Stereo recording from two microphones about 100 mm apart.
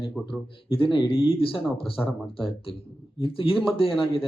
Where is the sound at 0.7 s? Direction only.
55° left (ahead or behind).